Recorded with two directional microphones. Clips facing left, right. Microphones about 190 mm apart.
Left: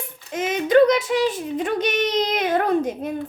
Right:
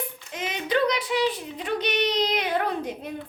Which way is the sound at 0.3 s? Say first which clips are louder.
Left 9 dB; 45° left (ahead or behind).